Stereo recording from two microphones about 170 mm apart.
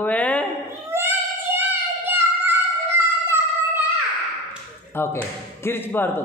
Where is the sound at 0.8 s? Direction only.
15° right (ahead or behind).